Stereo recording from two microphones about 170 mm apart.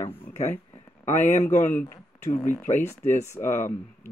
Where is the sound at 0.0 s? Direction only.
40° left (ahead or behind).